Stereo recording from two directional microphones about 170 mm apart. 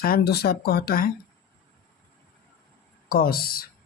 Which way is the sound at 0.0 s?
65° left (ahead or behind).